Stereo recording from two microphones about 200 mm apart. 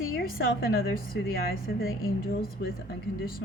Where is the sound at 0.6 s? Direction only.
50° left (ahead or behind).